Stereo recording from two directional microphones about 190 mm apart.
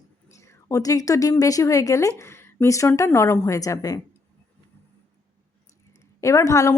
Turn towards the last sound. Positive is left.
turn(degrees=15)  # may be behind; listen again after turning